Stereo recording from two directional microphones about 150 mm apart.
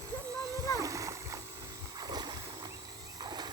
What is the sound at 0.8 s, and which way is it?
Splash, 20° right (ahead or behind).